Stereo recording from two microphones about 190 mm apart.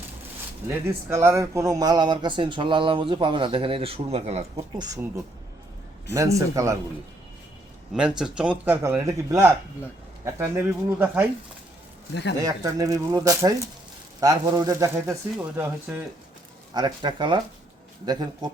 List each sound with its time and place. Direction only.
0.7 s speech: 15° right (ahead or behind); by 4.6 s 35° right (ahead or behind)
4.8 s speech: 20° right (ahead or behind)
7.9 s speech: 5° right (ahead or behind)
12.4 s speech: 20° right (ahead or behind)
16.7 s speech: 20° right (ahead or behind)